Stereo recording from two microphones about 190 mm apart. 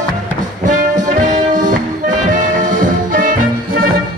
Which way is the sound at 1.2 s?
40° right (ahead or behind).